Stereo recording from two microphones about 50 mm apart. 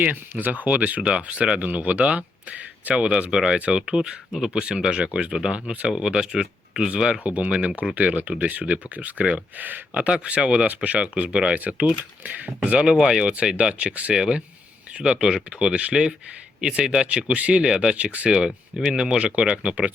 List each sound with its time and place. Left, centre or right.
0.0 s speech: right
18.3 s speech: centre